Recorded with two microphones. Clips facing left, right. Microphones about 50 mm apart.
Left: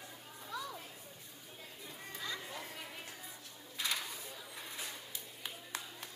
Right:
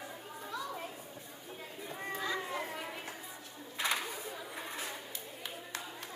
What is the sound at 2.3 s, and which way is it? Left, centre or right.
Children playing, right.